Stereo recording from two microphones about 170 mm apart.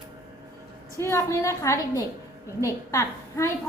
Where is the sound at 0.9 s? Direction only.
15° left (ahead or behind).